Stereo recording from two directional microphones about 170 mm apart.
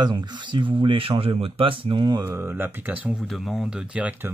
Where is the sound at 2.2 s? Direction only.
15° right (ahead or behind).